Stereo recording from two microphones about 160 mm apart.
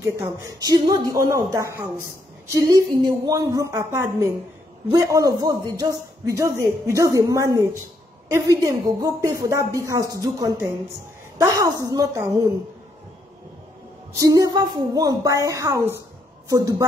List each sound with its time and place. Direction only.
0.0 s a man's voice: 15° right (ahead or behind)
14.1 s a man's voice: 20° right (ahead or behind)